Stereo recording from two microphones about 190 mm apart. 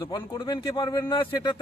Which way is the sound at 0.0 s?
20° left (ahead or behind).